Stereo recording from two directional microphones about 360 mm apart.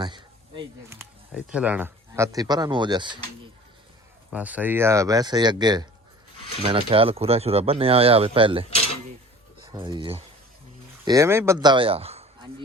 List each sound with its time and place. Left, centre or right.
0.0 s speech: centre
4.3 s speech: centre
9.7 s speech: centre